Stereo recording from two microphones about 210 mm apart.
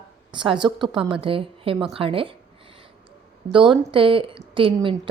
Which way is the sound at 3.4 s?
25° right (ahead or behind).